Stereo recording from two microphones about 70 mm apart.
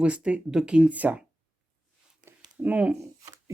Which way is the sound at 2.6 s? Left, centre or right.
Right.